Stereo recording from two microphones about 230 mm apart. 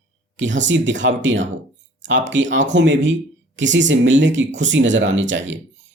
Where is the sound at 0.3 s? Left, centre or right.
Right.